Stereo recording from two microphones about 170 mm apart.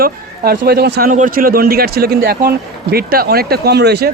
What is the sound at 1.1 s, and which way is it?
A man's voice, 55° right (ahead or behind).